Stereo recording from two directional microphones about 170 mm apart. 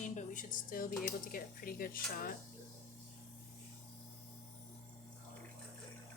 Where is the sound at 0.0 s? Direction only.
50° left (ahead or behind).